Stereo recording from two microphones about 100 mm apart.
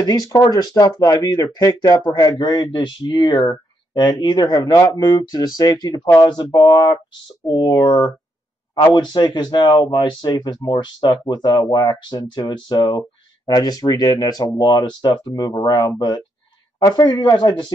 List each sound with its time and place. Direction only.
0.0 s speech: 40° left (ahead or behind)